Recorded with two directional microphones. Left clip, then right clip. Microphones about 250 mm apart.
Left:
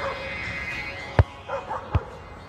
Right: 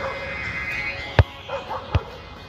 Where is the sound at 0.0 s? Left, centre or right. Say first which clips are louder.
Right 2 dB; centre.